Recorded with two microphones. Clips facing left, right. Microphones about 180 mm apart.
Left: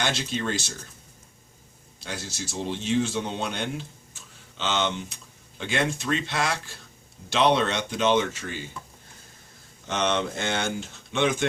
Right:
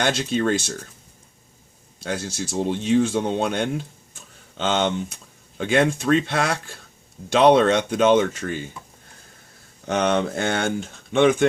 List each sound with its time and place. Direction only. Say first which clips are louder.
0.0 s speech: right 7 dB; 50° right (ahead or behind)
2.0 s speech: right 8 dB; 55° right (ahead or behind)
9.8 s speech: right 5 dB; 55° right (ahead or behind)